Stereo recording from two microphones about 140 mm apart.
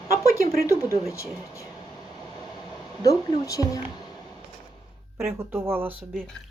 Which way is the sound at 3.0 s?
25° left (ahead or behind).